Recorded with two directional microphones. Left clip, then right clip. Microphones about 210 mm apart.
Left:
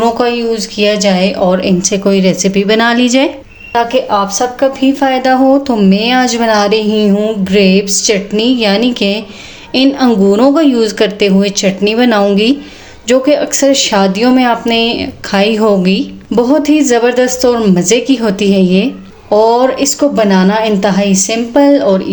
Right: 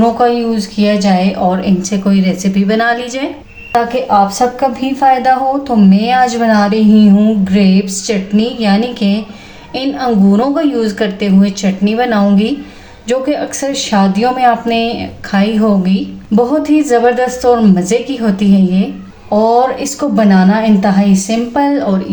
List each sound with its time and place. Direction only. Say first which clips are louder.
0.0 s a woman's voice: even; 45° left (ahead or behind)